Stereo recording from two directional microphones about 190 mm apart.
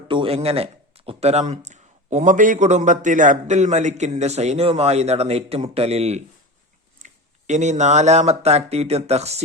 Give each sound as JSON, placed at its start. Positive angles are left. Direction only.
{"t": 0.1, "sound": "speech", "side_deg": -30}